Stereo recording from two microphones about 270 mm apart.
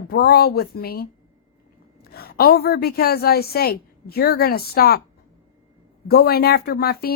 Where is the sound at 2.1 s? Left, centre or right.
Left.